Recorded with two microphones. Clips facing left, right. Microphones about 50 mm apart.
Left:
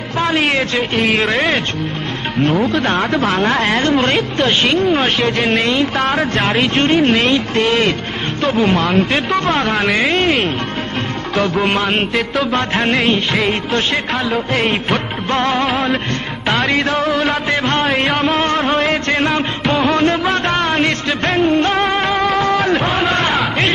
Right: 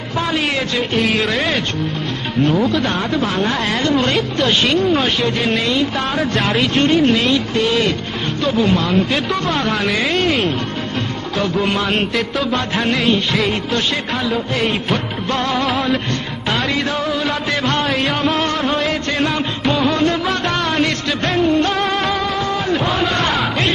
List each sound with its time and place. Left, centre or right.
0.2 s a man's voice: left
2.7 s speech: left
3.5 s a man's voice: left
5.0 s a man's voice: left
11.4 s a man's voice: left
16.6 s speech: left
17.5 s a man's voice: left
22.2 s music: left
22.8 s music: left